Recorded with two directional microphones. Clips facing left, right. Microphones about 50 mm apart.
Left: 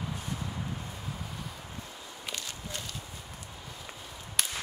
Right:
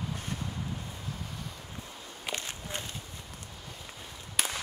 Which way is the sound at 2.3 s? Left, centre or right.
Right.